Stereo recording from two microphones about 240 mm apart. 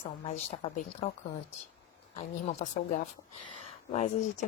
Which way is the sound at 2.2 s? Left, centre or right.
Left.